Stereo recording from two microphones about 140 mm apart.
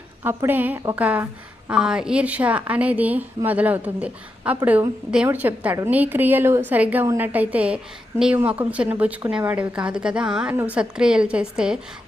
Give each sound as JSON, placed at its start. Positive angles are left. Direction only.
{"t": 0.2, "sound": "a woman's voice", "side_deg": -15}